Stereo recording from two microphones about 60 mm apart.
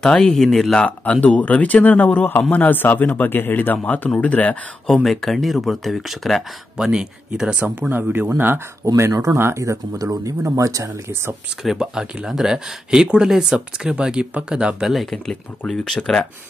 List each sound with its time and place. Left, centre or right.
0.0 s speech: centre
0.7 s speech: left
5.0 s speech: centre
6.8 s speech: centre
7.9 s speech: right
8.8 s speech: right
11.6 s speech: centre
14.9 s speech: centre